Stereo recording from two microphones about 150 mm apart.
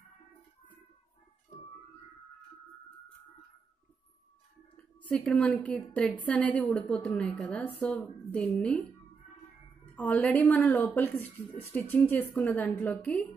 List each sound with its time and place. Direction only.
4.9 s a woman's voice: 10° left (ahead or behind)
9.9 s a woman's voice: 10° left (ahead or behind)